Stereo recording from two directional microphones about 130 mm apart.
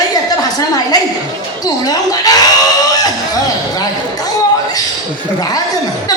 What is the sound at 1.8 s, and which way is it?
Speech, 30° left (ahead or behind).